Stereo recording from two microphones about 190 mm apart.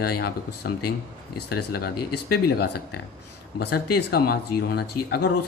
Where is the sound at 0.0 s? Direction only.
55° left (ahead or behind).